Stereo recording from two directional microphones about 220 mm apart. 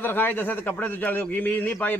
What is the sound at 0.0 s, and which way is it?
A man's voice, 10° left (ahead or behind).